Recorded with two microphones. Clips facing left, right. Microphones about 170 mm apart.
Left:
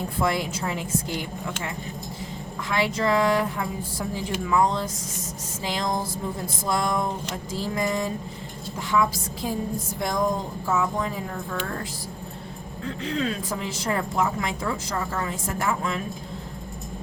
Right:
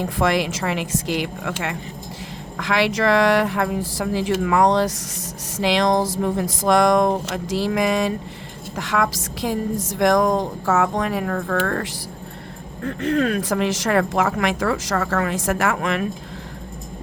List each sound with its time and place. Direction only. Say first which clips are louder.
0.0 s a woman's voice: right 5 dB; 90° right
12.8 s speech: right 7 dB; 55° right (ahead or behind); by 16.0 s 75° right (ahead or behind)